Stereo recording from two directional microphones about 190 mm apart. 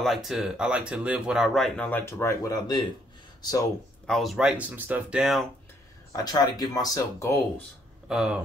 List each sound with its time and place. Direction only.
0.0 s speech: centre (ahead or behind); by 2.8 s 20° left (ahead or behind)
4.1 s speech: centre (ahead or behind)
6.1 s speech: 20° left (ahead or behind)
8.1 s speech: 5° right (ahead or behind)